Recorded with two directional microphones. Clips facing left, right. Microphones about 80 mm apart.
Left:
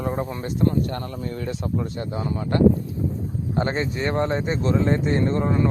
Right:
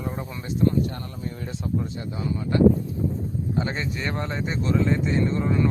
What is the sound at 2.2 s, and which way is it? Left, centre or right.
Speech, left.